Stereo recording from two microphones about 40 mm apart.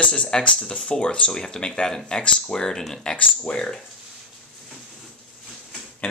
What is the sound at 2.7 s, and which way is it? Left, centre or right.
Speech, centre.